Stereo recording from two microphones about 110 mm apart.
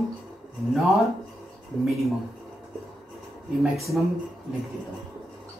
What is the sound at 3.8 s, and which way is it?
Speech, centre (ahead or behind).